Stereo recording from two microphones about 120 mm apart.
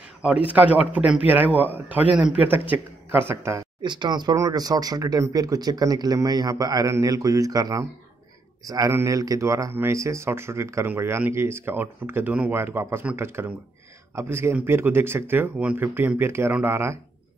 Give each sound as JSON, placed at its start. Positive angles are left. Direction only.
{"t": 0.2, "sound": "a man's voice", "side_deg": -10}
{"t": 3.8, "sound": "speech", "side_deg": -40}